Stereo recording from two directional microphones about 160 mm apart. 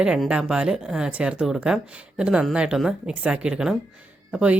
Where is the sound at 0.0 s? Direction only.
5° right (ahead or behind).